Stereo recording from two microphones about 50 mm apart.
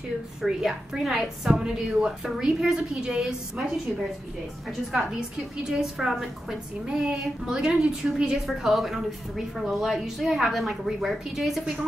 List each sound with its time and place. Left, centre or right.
0.4 s a woman's voice: centre
1.5 s a woman's voice: centre
5.6 s a woman's voice: centre
8.5 s a woman's voice: centre